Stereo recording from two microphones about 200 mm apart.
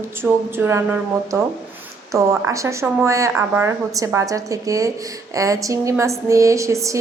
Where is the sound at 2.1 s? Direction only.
15° right (ahead or behind).